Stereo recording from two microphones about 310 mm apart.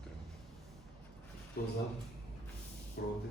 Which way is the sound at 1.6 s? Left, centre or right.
Left.